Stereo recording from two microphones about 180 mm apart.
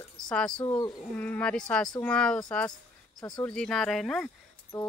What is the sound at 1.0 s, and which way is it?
Speech, 5° left (ahead or behind).